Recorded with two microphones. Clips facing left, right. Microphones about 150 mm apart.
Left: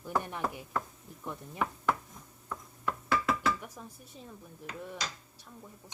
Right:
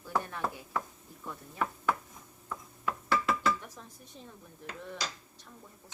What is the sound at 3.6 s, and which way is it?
Dishes, 10° left (ahead or behind).